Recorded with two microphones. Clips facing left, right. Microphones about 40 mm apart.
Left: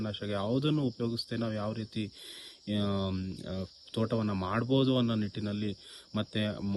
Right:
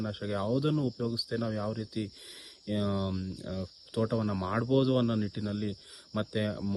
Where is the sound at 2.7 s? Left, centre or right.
Left.